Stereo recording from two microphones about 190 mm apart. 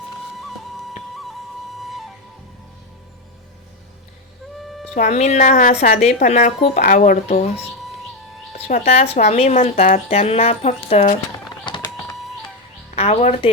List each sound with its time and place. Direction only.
1.1 s music: centre (ahead or behind)
1.8 s flute: centre (ahead or behind)
4.6 s music: centre (ahead or behind)
4.9 s speech: 40° left (ahead or behind)
6.0 s speech: 40° left (ahead or behind)
11.4 s a sound: 25° left (ahead or behind)
13.0 s speech: 35° left (ahead or behind)